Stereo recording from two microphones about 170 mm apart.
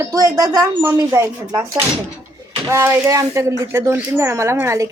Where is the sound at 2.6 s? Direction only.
15° right (ahead or behind).